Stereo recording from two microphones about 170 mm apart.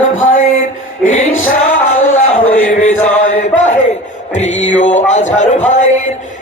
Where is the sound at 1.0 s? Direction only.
45° left (ahead or behind).